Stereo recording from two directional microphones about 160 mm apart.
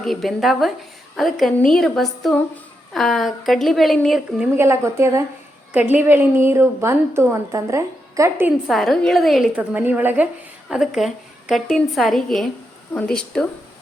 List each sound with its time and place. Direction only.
0.0 s a woman's voice: centre (ahead or behind)
4.5 s a woman's voice: 15° right (ahead or behind)
8.6 s a woman's voice: centre (ahead or behind)